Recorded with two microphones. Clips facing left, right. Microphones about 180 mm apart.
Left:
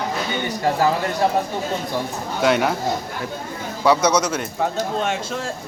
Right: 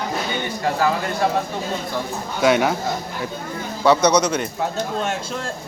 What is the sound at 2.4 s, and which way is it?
Speech, centre (ahead or behind).